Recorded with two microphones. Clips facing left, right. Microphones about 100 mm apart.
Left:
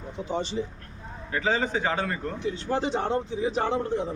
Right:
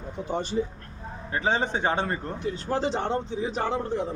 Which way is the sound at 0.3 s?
50° right (ahead or behind).